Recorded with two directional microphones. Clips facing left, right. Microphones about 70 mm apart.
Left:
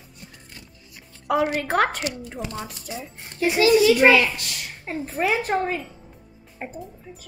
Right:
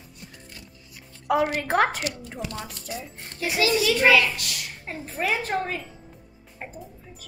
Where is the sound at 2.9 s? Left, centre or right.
Left.